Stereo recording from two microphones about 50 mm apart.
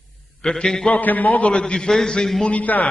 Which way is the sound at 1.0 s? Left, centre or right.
Left.